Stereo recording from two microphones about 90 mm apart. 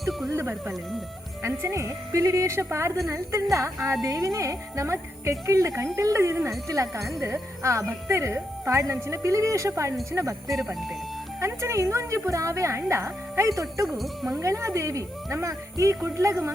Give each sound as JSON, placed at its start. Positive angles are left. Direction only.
{"t": 0.0, "sound": "music", "side_deg": 0}
{"t": 0.3, "sound": "speech", "side_deg": -30}
{"t": 4.0, "sound": "speech", "side_deg": -40}
{"t": 10.5, "sound": "speech", "side_deg": 0}
{"t": 11.3, "sound": "speech", "side_deg": -30}
{"t": 14.0, "sound": "speech", "side_deg": 0}
{"t": 14.4, "sound": "speech", "side_deg": -35}